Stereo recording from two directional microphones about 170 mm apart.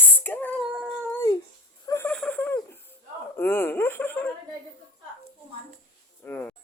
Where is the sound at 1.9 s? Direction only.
10° left (ahead or behind).